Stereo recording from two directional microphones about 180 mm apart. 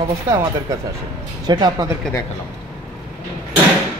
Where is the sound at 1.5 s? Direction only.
25° right (ahead or behind).